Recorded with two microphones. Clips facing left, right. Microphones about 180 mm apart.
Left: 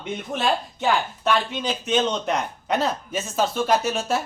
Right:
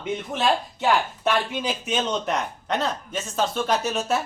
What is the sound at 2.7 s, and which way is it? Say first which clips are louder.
Speech: left 3 dB; 5° left (ahead or behind).